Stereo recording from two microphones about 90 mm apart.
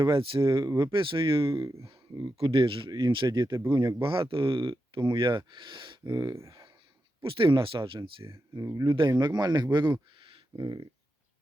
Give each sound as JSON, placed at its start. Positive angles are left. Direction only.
{"t": 0.2, "sound": "speech", "side_deg": -75}
{"t": 0.4, "sound": "speech", "side_deg": -35}
{"t": 0.9, "sound": "speech", "side_deg": -70}
{"t": 1.5, "sound": "speech", "side_deg": -40}
{"t": 2.4, "sound": "speech", "side_deg": -85}
{"t": 2.9, "sound": "speech", "side_deg": -60}
{"t": 3.5, "sound": "speech", "side_deg": -25}
{"t": 4.0, "sound": "speech", "side_deg": -80}
{"t": 4.7, "sound": "speech", "side_deg": -60}
{"t": 6.3, "sound": "speech", "side_deg": -35}
{"t": 7.2, "sound": "speech", "side_deg": -75}
{"t": 8.5, "sound": "speech", "side_deg": -40}
{"t": 9.1, "sound": "speech", "side_deg": -55}